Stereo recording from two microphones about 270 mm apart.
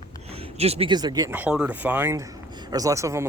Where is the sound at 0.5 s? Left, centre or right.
Right.